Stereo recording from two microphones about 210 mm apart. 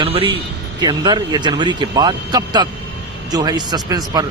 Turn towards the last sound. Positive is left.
turn(degrees=-20)  # may be behind; listen again after turning